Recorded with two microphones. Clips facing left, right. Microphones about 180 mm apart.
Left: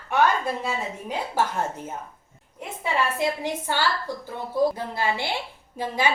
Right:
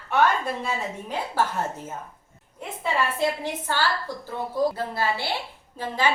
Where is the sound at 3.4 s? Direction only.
15° left (ahead or behind).